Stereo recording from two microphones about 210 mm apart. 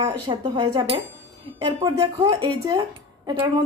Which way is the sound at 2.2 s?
20° right (ahead or behind).